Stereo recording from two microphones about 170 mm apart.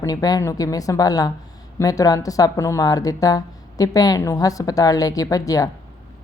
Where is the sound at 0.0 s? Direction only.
20° left (ahead or behind).